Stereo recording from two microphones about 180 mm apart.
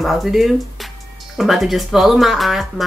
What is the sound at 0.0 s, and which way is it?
Speech, centre (ahead or behind).